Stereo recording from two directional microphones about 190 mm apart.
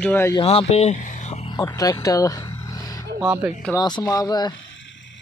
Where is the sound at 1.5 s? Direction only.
15° left (ahead or behind).